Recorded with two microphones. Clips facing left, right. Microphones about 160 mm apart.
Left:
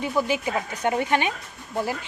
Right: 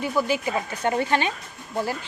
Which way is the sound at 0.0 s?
20° left (ahead or behind).